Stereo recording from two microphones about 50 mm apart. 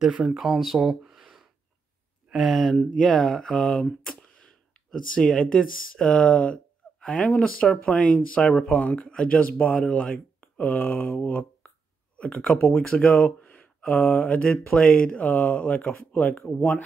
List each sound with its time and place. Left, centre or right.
0.2 s speech: centre
4.0 s a sound: centre
4.9 s speech: centre
10.8 s speech: left; by 13.3 s centre
13.4 s a sound: left
14.3 s speech: left